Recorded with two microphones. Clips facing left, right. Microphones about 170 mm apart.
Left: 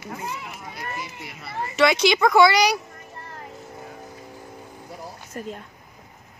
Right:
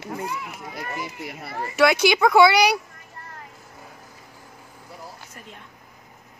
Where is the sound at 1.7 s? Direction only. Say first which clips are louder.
Right 1 dB; 5° right (ahead or behind).